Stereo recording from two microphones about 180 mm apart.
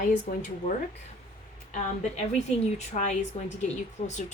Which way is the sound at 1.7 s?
40° left (ahead or behind).